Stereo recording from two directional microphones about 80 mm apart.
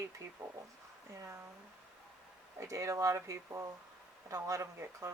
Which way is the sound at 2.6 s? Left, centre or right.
Right.